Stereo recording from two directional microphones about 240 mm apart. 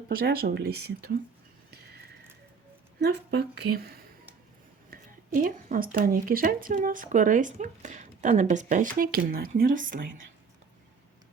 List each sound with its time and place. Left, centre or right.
0.1 s a woman's voice: right
3.0 s a woman's voice: right